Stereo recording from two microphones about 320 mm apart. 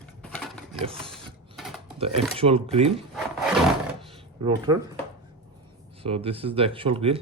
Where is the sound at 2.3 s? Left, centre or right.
Centre.